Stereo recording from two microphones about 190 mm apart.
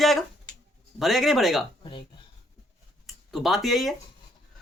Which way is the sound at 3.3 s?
Centre (ahead or behind).